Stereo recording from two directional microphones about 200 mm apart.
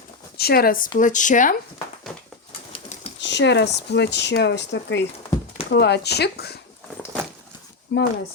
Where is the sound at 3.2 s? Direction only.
60° left (ahead or behind).